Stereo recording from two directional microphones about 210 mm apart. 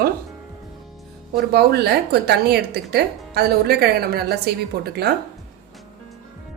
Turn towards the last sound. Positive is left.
turn(degrees=-50)  # may be behind; listen again after turning